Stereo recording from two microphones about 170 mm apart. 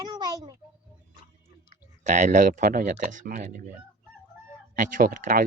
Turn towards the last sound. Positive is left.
turn(degrees=-55)  # may be behind; listen again after turning